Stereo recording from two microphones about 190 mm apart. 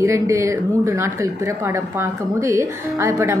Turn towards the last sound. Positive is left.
turn(degrees=-15)  # may be behind; listen again after turning